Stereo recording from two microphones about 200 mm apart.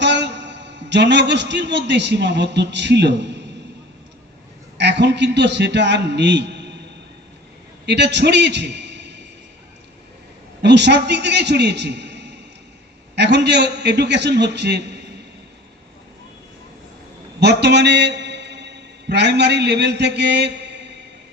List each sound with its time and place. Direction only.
0.0 s a man's voice: 60° right (ahead or behind)
4.8 s a man's voice: 60° right (ahead or behind)
7.9 s a man's voice: 60° right (ahead or behind)
10.6 s a man's voice: 60° right (ahead or behind)
17.4 s a man's voice: 55° right (ahead or behind)